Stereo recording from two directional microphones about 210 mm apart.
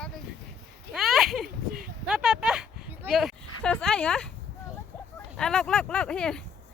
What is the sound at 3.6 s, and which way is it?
Speech, 5° left (ahead or behind).